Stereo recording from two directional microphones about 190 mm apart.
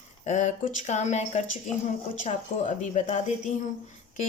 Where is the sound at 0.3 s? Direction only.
40° left (ahead or behind).